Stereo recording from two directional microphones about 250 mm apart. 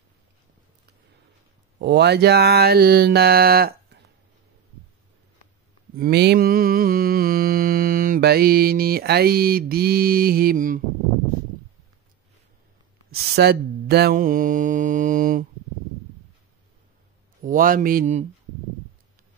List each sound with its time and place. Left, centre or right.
1.8 s mantra: right
5.9 s mantra: right
13.1 s mantra: right
17.4 s mantra: right